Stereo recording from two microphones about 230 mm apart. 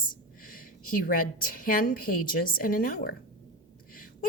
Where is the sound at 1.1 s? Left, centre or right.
Left.